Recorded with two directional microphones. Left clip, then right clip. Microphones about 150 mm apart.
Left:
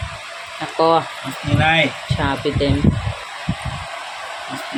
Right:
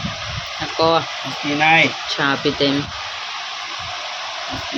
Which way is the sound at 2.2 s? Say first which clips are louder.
Right 2 dB; 10° right (ahead or behind).